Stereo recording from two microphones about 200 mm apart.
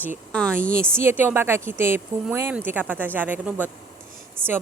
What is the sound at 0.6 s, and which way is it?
Speech, 45° right (ahead or behind).